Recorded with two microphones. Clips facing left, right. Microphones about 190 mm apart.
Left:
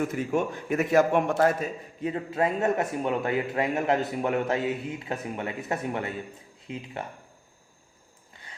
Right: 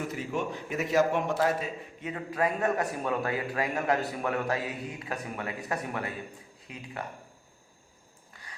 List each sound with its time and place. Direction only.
0.1 s a man's voice: 50° left (ahead or behind)
2.0 s a man's voice: 30° left (ahead or behind)